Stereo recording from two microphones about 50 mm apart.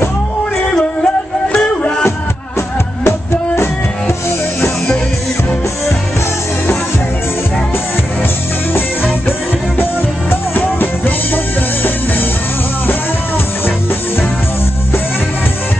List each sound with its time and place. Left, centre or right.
0.7 s music: centre
10.5 s music: left